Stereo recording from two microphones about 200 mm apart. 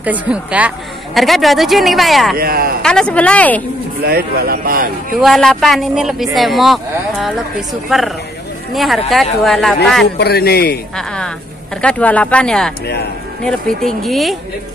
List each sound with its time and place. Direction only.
0.0 s speech: 5° right (ahead or behind)
2.3 s a man's voice: 50° right (ahead or behind)
2.8 s speech: 5° left (ahead or behind)
4.0 s a man's voice: 50° right (ahead or behind)
5.2 s speech: centre (ahead or behind)
10.1 s a man's voice: 55° left (ahead or behind)
11.0 s speech: 5° left (ahead or behind)
12.8 s speech: 55° left (ahead or behind)
13.4 s speech: 5° left (ahead or behind)